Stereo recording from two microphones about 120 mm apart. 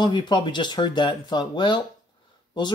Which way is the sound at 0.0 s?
40° left (ahead or behind).